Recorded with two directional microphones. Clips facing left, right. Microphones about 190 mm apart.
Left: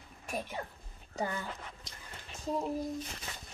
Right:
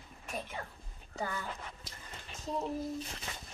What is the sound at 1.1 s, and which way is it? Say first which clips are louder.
Speech: left 3 dB; 20° left (ahead or behind).